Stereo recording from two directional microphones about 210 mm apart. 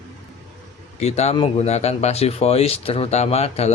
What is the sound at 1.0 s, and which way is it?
Speech, 30° left (ahead or behind).